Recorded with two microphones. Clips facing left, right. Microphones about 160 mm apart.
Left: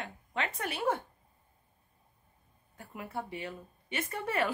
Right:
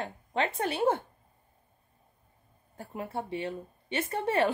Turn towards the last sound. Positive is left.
turn(degrees=-30)  # may be behind; listen again after turning